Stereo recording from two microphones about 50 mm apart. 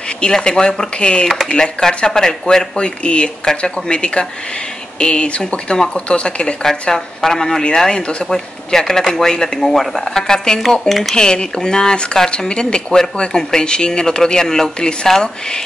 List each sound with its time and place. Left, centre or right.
0.2 s speech: centre
11.1 s speech: centre